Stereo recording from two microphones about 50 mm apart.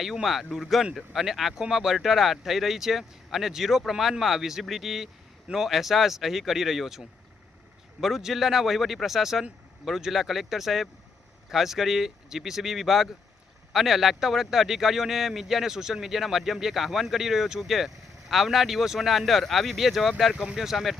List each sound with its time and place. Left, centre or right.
0.0 s a man's voice: centre
8.0 s a man's voice: centre
20.3 s speech: right
20.6 s a man's voice: centre